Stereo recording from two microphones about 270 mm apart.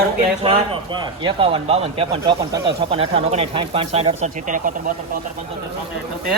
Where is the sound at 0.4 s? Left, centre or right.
Centre.